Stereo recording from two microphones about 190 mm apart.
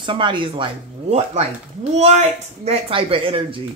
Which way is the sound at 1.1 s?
35° right (ahead or behind).